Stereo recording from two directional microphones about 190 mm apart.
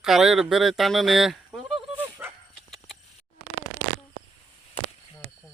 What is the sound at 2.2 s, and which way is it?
Dog, 10° right (ahead or behind).